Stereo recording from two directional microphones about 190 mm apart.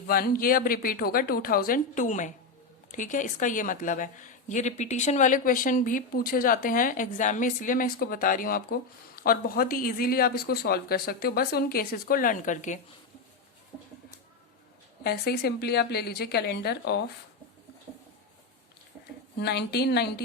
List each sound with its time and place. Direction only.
0.1 s a woman's voice: 50° left (ahead or behind)
15.0 s a woman's voice: 55° left (ahead or behind)
19.4 s a woman's voice: 60° left (ahead or behind)